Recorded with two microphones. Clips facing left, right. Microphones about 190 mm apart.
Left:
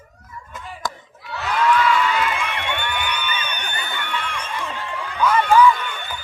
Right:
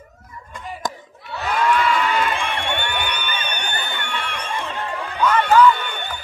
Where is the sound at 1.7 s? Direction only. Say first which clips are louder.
Left 1 dB; 35° right (ahead or behind).